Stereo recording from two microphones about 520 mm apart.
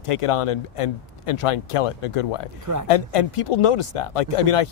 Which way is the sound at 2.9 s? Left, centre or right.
Left.